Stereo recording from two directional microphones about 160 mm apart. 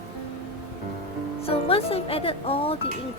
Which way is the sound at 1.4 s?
35° left (ahead or behind).